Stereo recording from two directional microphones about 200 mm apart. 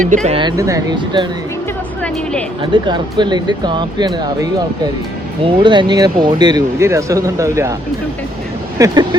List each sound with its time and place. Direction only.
0.0 s speech: 40° right (ahead or behind); by 1.3 s 20° right (ahead or behind)
2.6 s speech: 20° right (ahead or behind)
5.5 s speech: 25° right (ahead or behind)
8.8 s speech: 15° right (ahead or behind)